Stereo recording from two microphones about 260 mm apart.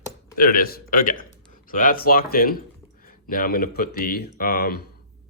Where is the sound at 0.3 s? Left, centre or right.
Left.